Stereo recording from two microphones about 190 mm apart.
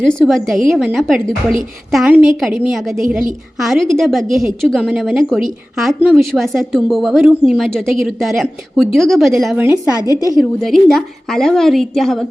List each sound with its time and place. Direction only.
0.0 s a woman's voice: 5° left (ahead or behind)
10.1 s a woman's voice: 20° left (ahead or behind)
10.3 s a woman's voice: centre (ahead or behind)